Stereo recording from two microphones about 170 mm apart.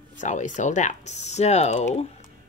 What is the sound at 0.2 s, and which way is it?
Speech, 45° left (ahead or behind).